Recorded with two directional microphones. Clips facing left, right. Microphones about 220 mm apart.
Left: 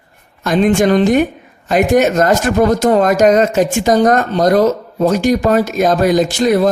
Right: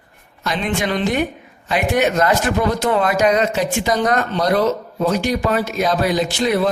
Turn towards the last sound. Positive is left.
turn(degrees=45)  # may be behind; listen again after turning